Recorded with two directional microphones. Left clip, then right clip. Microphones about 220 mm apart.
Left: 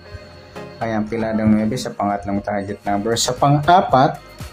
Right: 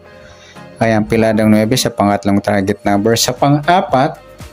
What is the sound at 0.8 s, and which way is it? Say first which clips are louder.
Speech: right 10 dB; 35° right (ahead or behind).